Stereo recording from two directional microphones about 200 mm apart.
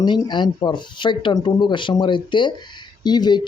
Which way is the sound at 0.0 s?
20° left (ahead or behind).